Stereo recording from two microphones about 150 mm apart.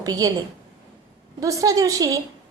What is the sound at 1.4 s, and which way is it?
Speech, 20° right (ahead or behind).